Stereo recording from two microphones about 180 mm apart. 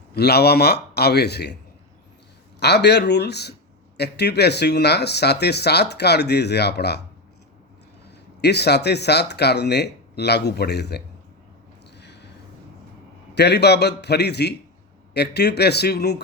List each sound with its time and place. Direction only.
0.1 s a man's voice: 60° left (ahead or behind)
2.6 s speech: 65° left (ahead or behind)
8.0 s speech: 65° left (ahead or behind)
11.9 s a sound: 70° left (ahead or behind)
13.3 s a man's voice: 65° left (ahead or behind)